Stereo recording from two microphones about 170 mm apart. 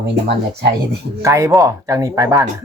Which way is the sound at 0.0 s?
75° right (ahead or behind).